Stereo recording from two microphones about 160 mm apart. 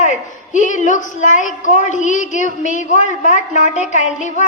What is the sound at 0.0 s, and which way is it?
A woman's voice, 50° left (ahead or behind).